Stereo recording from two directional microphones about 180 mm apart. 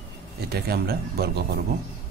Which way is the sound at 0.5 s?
60° right (ahead or behind).